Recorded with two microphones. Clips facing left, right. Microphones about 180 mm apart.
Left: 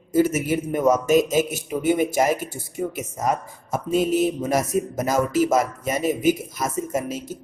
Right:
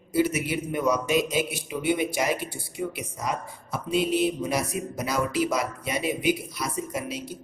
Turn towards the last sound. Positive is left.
turn(degrees=45)  # may be behind; listen again after turning